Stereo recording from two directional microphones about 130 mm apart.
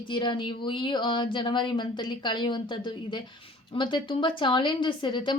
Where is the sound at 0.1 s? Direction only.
40° left (ahead or behind).